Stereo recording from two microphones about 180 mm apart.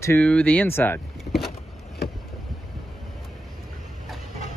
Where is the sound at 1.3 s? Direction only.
45° left (ahead or behind).